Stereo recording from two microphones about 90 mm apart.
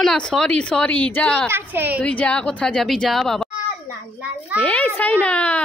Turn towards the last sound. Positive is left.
turn(degrees=15)  # may be behind; listen again after turning